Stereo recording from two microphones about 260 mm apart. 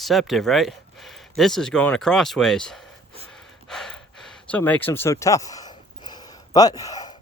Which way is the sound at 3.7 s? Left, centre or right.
Centre.